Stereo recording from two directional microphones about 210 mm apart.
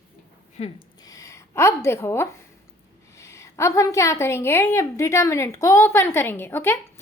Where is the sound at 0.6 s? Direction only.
30° left (ahead or behind).